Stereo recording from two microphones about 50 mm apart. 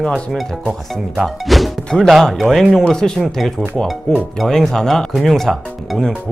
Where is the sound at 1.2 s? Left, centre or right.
Centre.